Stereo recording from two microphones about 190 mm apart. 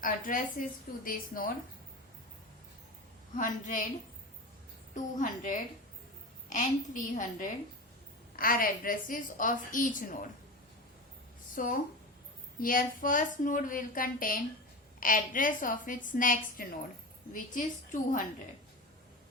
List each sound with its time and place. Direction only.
0.0 s a woman's voice: 45° left (ahead or behind)
3.3 s a woman's voice: 45° left (ahead or behind)
5.1 s a woman's voice: 40° left (ahead or behind)
11.5 s a woman's voice: 45° left (ahead or behind)